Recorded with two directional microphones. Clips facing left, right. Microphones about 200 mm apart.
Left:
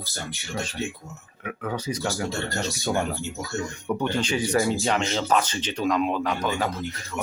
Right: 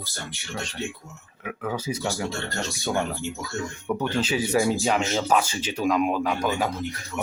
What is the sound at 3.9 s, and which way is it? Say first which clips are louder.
Speech: even; 5° right (ahead or behind).